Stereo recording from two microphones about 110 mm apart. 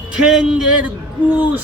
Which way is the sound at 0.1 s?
5° right (ahead or behind).